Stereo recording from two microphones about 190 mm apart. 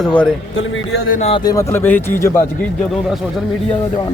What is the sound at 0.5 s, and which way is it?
Speech, 85° left.